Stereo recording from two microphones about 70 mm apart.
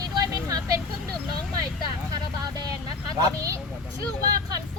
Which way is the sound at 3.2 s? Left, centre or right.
Right.